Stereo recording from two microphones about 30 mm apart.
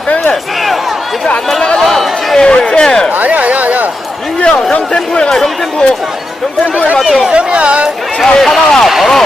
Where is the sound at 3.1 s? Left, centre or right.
Right.